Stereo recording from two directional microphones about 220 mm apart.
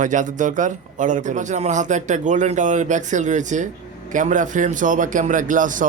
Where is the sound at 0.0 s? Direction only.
35° right (ahead or behind).